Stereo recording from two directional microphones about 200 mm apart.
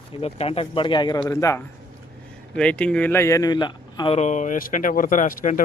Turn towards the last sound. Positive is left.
turn(degrees=40)  # may be behind; listen again after turning